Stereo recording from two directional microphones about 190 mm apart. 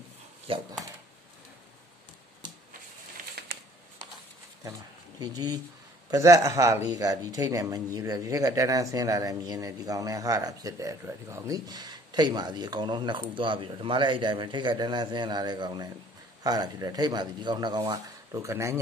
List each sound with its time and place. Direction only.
0.5 s speech: 30° right (ahead or behind)
2.4 s a sound: 25° right (ahead or behind)
3.4 s shuffling cards: 55° right (ahead or behind)
5.2 s speech: 20° right (ahead or behind)